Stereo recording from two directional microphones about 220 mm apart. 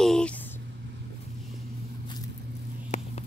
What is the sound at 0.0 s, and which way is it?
Vehicle, 5° left (ahead or behind).